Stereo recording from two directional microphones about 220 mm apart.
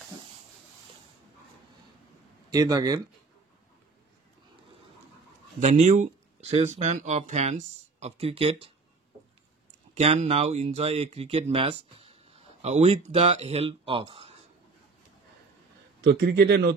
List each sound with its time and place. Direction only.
2.5 s speech: 15° right (ahead or behind)
5.6 s speech: 30° right (ahead or behind)
9.9 s speech: 30° right (ahead or behind)
16.0 s a man's voice: 50° right (ahead or behind)